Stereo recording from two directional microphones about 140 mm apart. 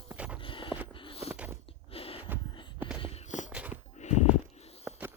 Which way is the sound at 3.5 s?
10° right (ahead or behind).